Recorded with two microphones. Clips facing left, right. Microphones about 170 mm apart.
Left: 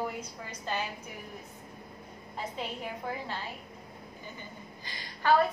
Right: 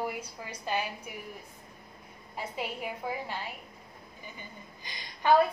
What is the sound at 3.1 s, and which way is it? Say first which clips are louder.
Speech: right 2 dB; 10° right (ahead or behind).